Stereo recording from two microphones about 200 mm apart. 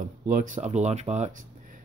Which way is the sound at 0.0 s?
40° right (ahead or behind).